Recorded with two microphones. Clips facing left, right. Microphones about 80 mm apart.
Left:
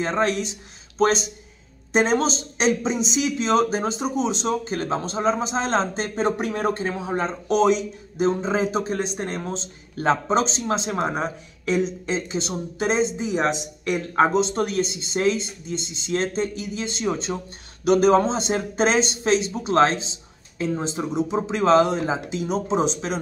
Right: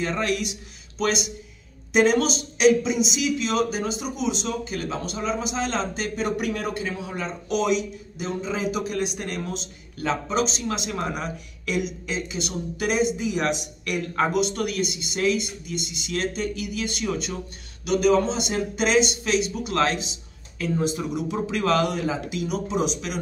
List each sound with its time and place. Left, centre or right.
0.0 s a man's voice: left